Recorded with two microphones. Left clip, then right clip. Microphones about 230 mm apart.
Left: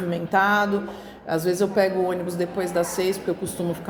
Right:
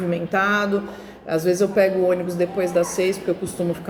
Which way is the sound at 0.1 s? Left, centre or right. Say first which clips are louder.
Left 1 dB; centre.